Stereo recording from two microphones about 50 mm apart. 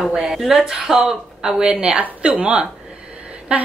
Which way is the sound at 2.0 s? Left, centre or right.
Right.